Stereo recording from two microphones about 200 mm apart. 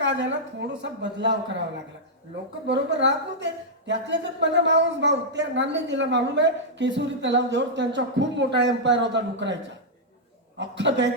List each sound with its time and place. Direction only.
0.0 s a woman's voice: 65° right (ahead or behind)
2.6 s a woman's voice: 65° right (ahead or behind)